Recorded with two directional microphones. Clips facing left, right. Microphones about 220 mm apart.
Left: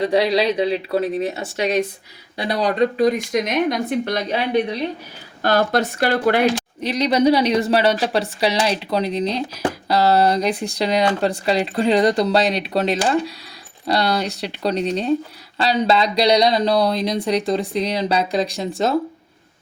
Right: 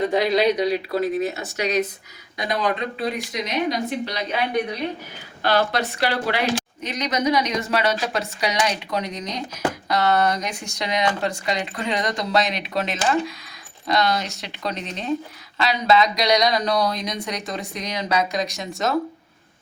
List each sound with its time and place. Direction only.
0.3 s speech: 30° left (ahead or behind); by 4.2 s 55° left (ahead or behind)
5.4 s speech: 45° left (ahead or behind)
6.8 s speech: 35° left (ahead or behind)